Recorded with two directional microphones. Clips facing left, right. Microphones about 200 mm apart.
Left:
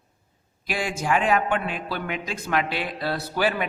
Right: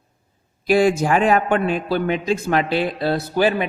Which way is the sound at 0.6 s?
35° right (ahead or behind).